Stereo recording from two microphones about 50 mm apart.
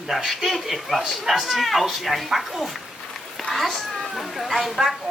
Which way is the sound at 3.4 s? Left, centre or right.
Centre.